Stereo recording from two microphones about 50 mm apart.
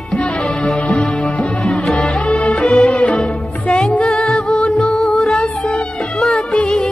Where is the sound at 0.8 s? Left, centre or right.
Left.